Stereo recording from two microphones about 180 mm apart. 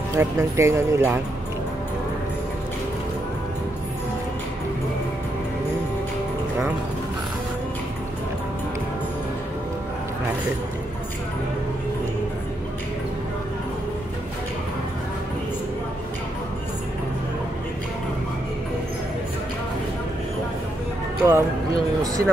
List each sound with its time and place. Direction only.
0.1 s speech: 15° right (ahead or behind)
21.2 s speech: 15° right (ahead or behind)